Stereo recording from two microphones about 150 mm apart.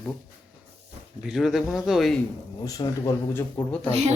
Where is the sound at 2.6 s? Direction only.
25° left (ahead or behind).